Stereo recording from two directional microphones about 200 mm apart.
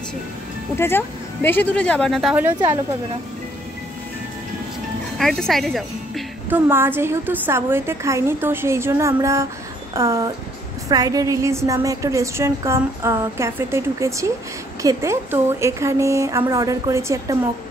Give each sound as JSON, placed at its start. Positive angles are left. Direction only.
{"t": 0.7, "sound": "speech", "side_deg": 10}
{"t": 5.1, "sound": "a woman's voice", "side_deg": 0}
{"t": 6.7, "sound": "a woman's voice", "side_deg": -10}